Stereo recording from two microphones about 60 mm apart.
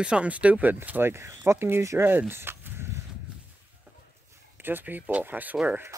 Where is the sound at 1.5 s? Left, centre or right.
Right.